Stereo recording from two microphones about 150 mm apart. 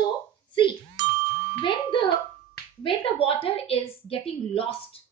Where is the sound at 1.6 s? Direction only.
35° left (ahead or behind).